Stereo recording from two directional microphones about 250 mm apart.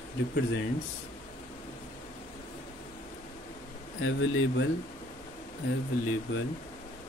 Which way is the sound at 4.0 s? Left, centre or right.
Left.